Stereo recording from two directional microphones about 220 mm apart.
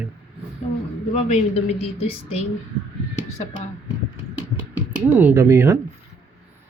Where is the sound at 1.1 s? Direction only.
30° left (ahead or behind).